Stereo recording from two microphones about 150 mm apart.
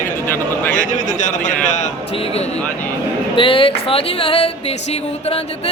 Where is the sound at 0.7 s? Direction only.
60° left (ahead or behind).